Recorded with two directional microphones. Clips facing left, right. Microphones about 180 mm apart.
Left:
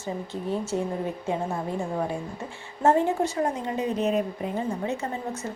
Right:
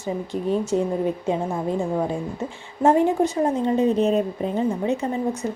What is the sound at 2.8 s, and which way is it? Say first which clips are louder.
A woman's voice: right 4 dB; 15° right (ahead or behind).